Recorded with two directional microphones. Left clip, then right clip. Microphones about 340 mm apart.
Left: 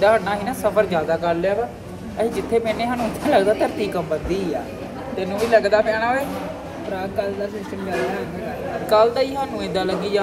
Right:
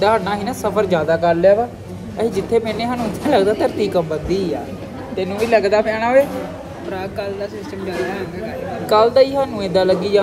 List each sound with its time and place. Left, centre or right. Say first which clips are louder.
0.0 s speech: right 1 dB; centre
5.1 s speech: right 1 dB; right
8.9 s speech: right 4 dB; centre